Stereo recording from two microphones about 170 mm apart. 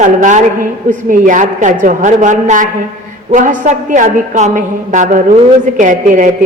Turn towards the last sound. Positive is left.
turn(degrees=-50)  # may be behind; listen again after turning